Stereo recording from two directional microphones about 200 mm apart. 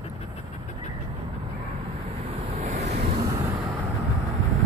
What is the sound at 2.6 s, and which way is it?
Waves, 35° right (ahead or behind).